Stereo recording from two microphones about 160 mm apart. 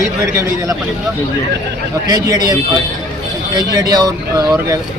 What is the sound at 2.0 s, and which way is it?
Speech, 25° right (ahead or behind).